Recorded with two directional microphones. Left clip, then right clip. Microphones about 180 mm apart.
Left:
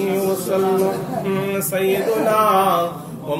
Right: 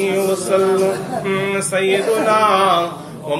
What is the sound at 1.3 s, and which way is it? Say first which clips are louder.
Male singing: right 4 dB; 50° left (ahead or behind).